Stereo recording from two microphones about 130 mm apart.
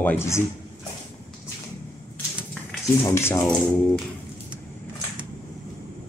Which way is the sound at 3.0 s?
20° left (ahead or behind).